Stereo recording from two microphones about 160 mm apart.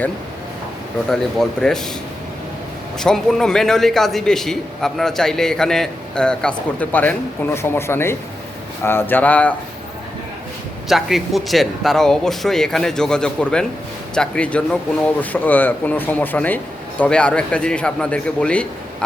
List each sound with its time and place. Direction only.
1.1 s a man's voice: 5° left (ahead or behind)
3.0 s a man's voice: centre (ahead or behind)
10.8 s a man's voice: centre (ahead or behind)